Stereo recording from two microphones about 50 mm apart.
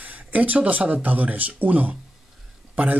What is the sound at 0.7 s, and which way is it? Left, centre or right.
A man's voice, right.